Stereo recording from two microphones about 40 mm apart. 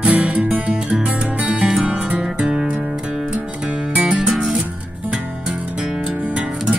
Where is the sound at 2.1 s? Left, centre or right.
Right.